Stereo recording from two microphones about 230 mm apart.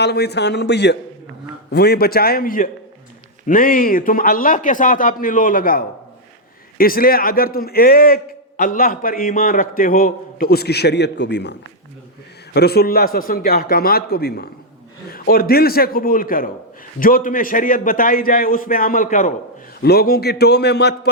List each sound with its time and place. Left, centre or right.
0.0 s a man's voice: left
12.5 s a man's voice: left